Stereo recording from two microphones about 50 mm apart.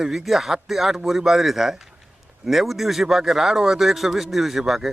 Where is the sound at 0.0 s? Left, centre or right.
Centre.